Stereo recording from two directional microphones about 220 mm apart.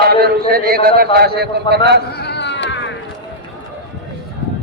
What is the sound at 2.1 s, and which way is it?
Cat, 50° left (ahead or behind).